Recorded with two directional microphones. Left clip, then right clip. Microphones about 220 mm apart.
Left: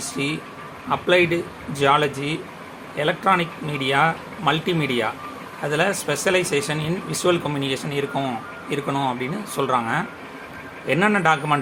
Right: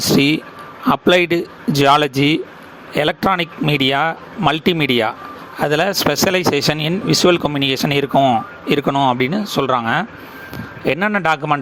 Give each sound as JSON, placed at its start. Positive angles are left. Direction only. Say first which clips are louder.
{"t": 0.9, "sound": "speech", "louder": "right 5 dB", "side_deg": -45}